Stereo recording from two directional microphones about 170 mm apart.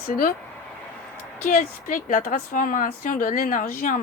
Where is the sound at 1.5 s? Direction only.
50° left (ahead or behind).